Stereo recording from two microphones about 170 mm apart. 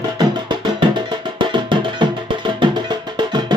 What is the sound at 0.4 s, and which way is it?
Music, 25° right (ahead or behind).